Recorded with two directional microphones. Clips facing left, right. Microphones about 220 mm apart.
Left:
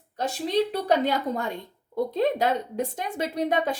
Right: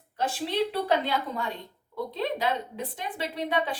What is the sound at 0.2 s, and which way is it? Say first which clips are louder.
A woman's voice: left 3 dB; 40° left (ahead or behind).